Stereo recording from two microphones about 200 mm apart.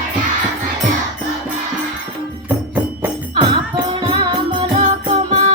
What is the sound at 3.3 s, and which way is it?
Music, 25° right (ahead or behind).